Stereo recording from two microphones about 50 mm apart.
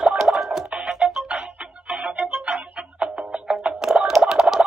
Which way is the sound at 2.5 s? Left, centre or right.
Right.